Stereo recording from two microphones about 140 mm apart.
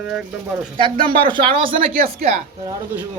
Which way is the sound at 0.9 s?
35° right (ahead or behind).